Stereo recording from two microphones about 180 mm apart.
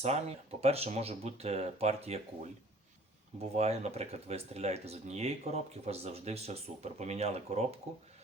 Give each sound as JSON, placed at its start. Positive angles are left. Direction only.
{"t": 0.0, "sound": "speech", "side_deg": -35}
{"t": 3.5, "sound": "speech", "side_deg": -35}